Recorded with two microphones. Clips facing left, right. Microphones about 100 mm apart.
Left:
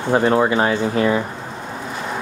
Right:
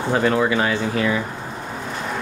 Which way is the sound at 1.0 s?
35° left (ahead or behind).